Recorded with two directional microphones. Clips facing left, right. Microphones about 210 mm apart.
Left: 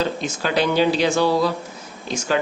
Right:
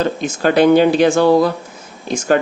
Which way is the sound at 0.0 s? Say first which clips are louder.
Right 6 dB; 55° right (ahead or behind).